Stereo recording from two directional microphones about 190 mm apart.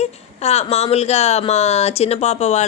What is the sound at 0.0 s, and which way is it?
Speech, 35° left (ahead or behind).